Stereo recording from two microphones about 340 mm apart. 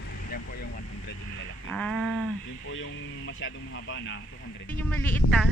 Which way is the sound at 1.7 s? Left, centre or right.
Centre.